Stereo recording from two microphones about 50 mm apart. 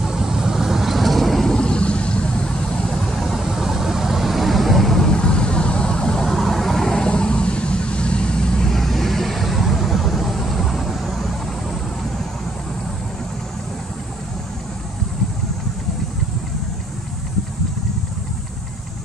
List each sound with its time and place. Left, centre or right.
0.0 s vehicle: centre
1.6 s vehicle: centre
2.9 s vehicle: centre
6.2 s vehicle: centre
8.7 s vehicle: centre